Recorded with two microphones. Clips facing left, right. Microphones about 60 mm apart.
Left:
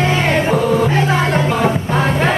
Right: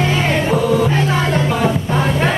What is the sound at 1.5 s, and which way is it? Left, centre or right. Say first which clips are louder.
Music: left 1 dB; left.